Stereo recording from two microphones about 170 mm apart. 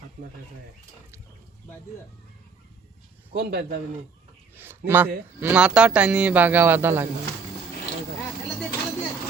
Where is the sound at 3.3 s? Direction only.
70° right (ahead or behind).